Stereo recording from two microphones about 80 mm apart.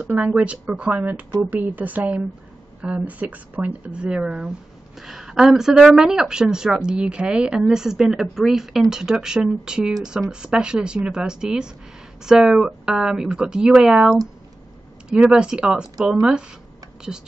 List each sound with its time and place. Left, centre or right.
0.0 s speech: centre